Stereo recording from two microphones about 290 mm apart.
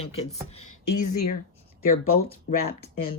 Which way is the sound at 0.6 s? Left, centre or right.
Left.